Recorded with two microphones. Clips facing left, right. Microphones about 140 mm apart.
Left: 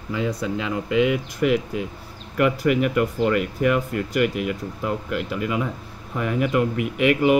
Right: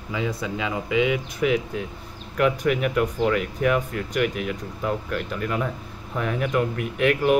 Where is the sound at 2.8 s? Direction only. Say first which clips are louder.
Left 1 dB; centre (ahead or behind).